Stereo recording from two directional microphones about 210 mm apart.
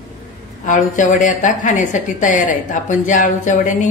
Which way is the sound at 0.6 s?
35° left (ahead or behind).